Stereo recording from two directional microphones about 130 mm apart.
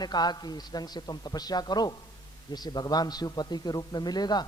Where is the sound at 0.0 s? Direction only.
30° left (ahead or behind).